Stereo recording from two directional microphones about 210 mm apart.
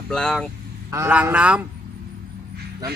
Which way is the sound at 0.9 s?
10° right (ahead or behind).